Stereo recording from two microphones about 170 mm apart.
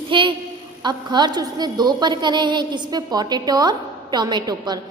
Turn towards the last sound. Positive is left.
turn(degrees=-25)  # may be behind; listen again after turning